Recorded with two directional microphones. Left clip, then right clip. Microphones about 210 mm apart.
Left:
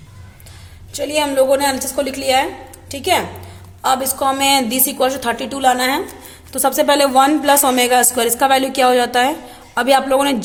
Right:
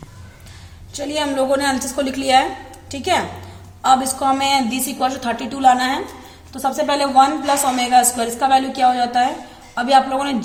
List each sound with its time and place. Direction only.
0.9 s a woman's voice: 20° left (ahead or behind)
6.6 s speech: 40° left (ahead or behind)